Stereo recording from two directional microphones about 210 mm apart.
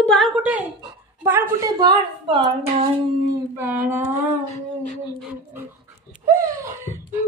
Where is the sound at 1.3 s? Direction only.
15° right (ahead or behind).